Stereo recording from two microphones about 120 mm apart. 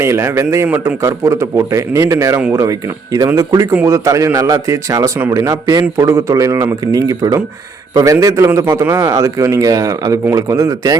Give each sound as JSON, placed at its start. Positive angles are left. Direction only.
{"t": 0.0, "sound": "a man's voice", "side_deg": -25}